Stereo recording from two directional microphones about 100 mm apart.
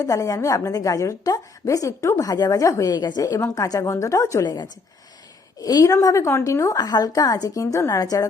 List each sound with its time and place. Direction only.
0.0 s a woman's voice: 35° left (ahead or behind)
5.5 s a woman's voice: 35° left (ahead or behind)